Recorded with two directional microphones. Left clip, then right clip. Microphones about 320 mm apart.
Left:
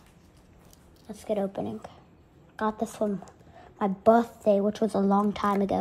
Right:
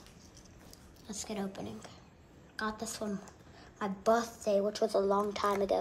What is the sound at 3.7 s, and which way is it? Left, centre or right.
Speech, centre.